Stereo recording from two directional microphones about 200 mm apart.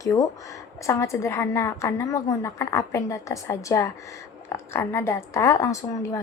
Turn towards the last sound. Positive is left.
turn(degrees=15)  # may be behind; listen again after turning